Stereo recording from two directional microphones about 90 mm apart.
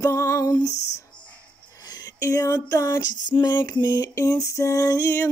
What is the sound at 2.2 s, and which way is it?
Female singing, 40° left (ahead or behind).